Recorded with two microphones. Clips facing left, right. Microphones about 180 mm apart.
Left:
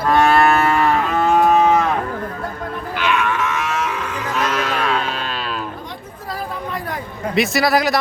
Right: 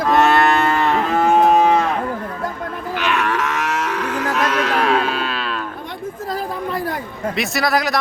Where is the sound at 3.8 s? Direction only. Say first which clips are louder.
Right 3 dB; 70° right (ahead or behind).